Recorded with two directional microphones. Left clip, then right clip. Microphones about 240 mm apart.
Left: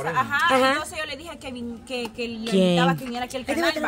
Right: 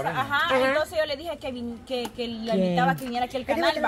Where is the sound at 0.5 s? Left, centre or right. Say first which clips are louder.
Left 2 dB; left.